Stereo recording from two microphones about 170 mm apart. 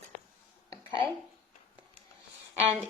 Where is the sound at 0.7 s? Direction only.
30° right (ahead or behind).